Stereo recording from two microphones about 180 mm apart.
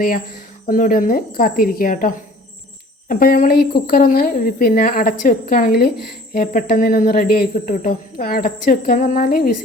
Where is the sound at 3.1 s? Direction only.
50° left (ahead or behind).